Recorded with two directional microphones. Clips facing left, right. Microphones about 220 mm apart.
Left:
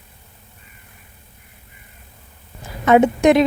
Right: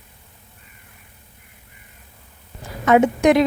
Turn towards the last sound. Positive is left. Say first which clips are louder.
# left 2 dB
turn(degrees=25)  # may be behind; listen again after turning